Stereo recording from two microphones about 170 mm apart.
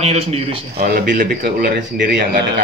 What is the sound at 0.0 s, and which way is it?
Speech, 35° right (ahead or behind).